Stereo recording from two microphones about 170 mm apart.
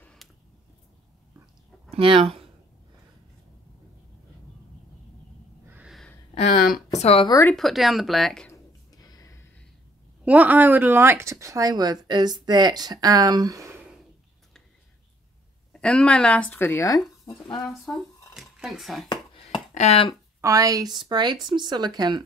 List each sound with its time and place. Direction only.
0.0 s a sound: 5° left (ahead or behind)
1.9 s speech: 30° right (ahead or behind)
5.7 s a sound: 5° right (ahead or behind)
7.0 s speech: 35° left (ahead or behind)
7.2 s speech: 20° left (ahead or behind)
7.5 s speech: centre (ahead or behind)
8.5 s a sound: 20° left (ahead or behind)
10.2 s speech: 10° right (ahead or behind)
15.7 s speech: 5° left (ahead or behind)
17.6 s speech: centre (ahead or behind)
19.0 s a sound: 25° left (ahead or behind)
19.7 s speech: 40° left (ahead or behind)
20.3 s speech: 20° right (ahead or behind)